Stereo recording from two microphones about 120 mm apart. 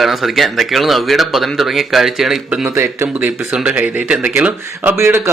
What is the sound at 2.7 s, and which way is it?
Speech, 20° right (ahead or behind).